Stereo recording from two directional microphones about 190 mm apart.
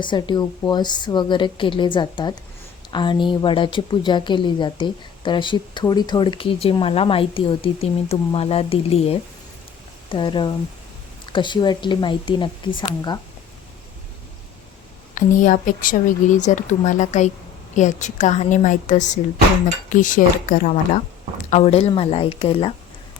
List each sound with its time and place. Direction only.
0.0 s a woman's voice: 25° left (ahead or behind)
15.1 s a woman's voice: 45° left (ahead or behind); by 22.7 s 30° left (ahead or behind)